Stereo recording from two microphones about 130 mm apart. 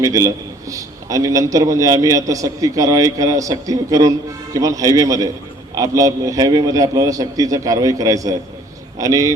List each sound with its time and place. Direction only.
0.0 s a man's voice: 25° right (ahead or behind)